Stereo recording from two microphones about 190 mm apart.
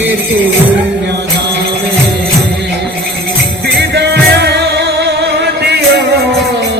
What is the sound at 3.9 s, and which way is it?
Music, 60° right (ahead or behind).